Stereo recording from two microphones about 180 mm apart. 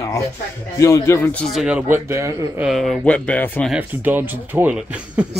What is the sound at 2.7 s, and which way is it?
Speech, centre (ahead or behind).